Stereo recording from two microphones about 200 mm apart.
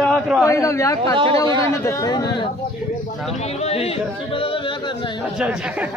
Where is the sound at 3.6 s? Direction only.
30° left (ahead or behind).